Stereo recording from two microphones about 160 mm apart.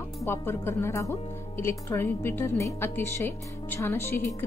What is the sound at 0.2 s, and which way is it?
Speech, 15° left (ahead or behind).